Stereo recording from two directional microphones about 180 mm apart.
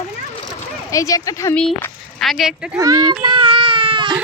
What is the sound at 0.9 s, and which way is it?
Speech, 20° left (ahead or behind).